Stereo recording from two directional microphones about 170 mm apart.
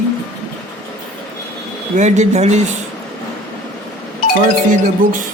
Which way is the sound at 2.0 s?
40° right (ahead or behind).